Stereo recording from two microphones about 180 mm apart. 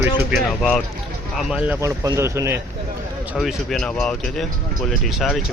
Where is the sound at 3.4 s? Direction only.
Centre (ahead or behind).